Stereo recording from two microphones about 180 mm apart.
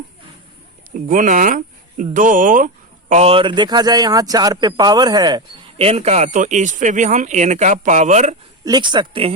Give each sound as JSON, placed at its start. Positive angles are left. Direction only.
{"t": 1.0, "sound": "speech", "side_deg": -50}
{"t": 8.6, "sound": "speech", "side_deg": -25}